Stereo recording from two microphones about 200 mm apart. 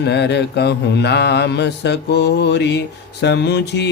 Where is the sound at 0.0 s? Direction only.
55° left (ahead or behind).